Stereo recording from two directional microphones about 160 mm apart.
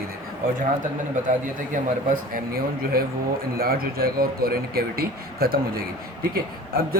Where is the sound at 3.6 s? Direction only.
70° right (ahead or behind).